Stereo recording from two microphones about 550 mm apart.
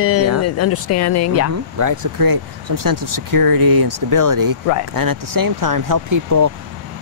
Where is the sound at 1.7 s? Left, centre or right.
Right.